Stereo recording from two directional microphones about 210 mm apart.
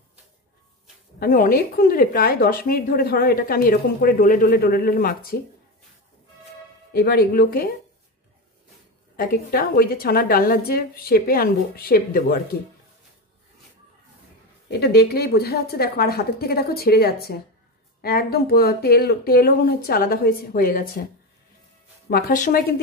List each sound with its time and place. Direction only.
1.2 s a woman's voice: 40° left (ahead or behind)
6.9 s a woman's voice: 50° left (ahead or behind)
9.1 s a woman's voice: 45° left (ahead or behind)
14.7 s a woman's voice: 50° left (ahead or behind)
22.1 s a woman's voice: 40° left (ahead or behind)